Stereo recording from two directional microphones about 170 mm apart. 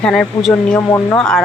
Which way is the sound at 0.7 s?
20° left (ahead or behind).